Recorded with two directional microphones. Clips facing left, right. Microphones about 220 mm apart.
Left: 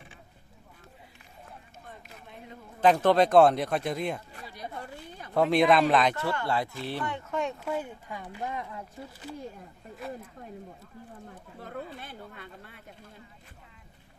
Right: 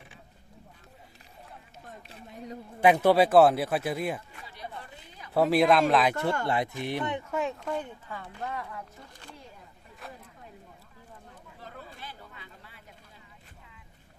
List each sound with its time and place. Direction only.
2.0 s speech: 30° right (ahead or behind)
2.8 s speech: 10° right (ahead or behind)
5.3 s speech: 5° right (ahead or behind)
6.5 s speech: 20° right (ahead or behind)
7.6 s speech: 5° left (ahead or behind)
10.0 s speech: centre (ahead or behind)
11.6 s speech: 55° left (ahead or behind)